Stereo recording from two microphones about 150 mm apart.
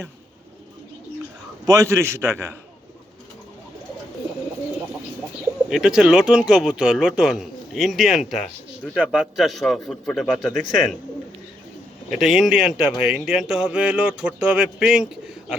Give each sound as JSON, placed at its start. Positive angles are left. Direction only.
{"t": 1.6, "sound": "a man's voice", "side_deg": -20}
{"t": 5.6, "sound": "speech", "side_deg": -5}
{"t": 12.1, "sound": "speech", "side_deg": 0}